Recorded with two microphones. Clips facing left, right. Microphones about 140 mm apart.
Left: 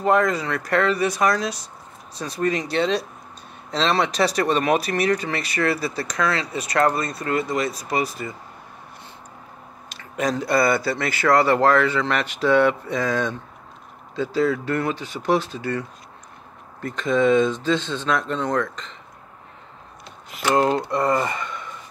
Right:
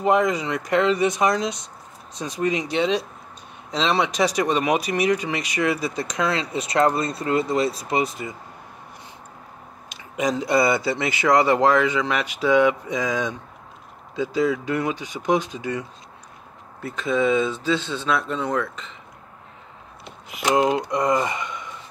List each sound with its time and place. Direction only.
0.0 s speech: 15° right (ahead or behind)
9.8 s speech: 15° right (ahead or behind)
16.8 s speech: 10° right (ahead or behind)
20.2 s speech: 15° right (ahead or behind)